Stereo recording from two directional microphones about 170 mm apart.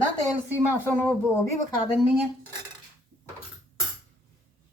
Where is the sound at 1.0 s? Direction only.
15° left (ahead or behind).